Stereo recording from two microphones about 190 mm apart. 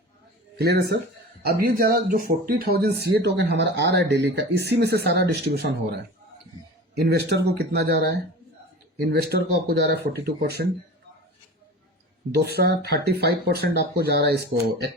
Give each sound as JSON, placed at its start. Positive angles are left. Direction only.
{"t": 0.6, "sound": "speech", "side_deg": -60}
{"t": 9.6, "sound": "speech", "side_deg": -60}
{"t": 12.3, "sound": "speech", "side_deg": -60}